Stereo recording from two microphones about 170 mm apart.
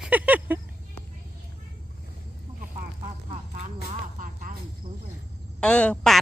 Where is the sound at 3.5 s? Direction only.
45° right (ahead or behind).